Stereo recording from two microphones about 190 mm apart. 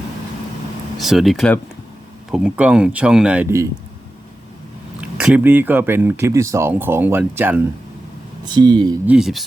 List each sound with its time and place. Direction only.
0.9 s speech: centre (ahead or behind)
4.9 s speech: 5° right (ahead or behind)
8.4 s speech: 25° right (ahead or behind)
9.0 s speech: 5° right (ahead or behind)